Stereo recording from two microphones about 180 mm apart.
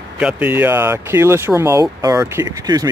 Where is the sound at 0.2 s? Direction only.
5° right (ahead or behind).